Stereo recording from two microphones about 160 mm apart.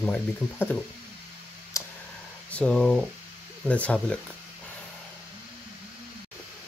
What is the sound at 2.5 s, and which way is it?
Speech, 5° left (ahead or behind).